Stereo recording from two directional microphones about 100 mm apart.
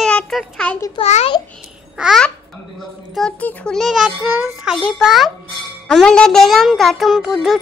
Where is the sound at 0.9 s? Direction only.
85° left.